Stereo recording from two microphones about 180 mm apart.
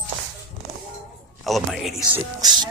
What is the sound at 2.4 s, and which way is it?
Speech, 25° right (ahead or behind).